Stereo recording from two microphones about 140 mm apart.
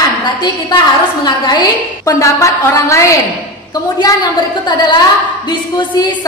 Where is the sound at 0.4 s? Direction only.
30° left (ahead or behind).